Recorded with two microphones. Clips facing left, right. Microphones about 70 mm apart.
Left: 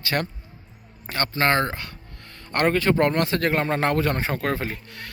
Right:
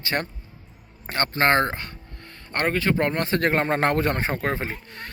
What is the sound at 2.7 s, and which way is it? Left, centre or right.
Speech, centre.